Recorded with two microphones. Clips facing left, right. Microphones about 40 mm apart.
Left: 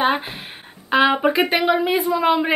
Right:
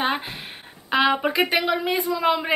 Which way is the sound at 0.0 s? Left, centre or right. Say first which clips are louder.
Left 5 dB; centre.